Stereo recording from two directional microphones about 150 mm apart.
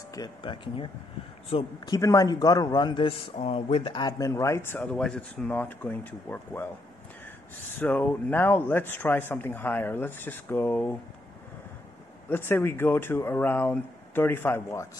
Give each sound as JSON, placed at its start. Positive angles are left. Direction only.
{"t": 0.1, "sound": "speech", "side_deg": 30}
{"t": 1.9, "sound": "a man's voice", "side_deg": 20}
{"t": 7.8, "sound": "a man's voice", "side_deg": 10}
{"t": 12.3, "sound": "a man's voice", "side_deg": 15}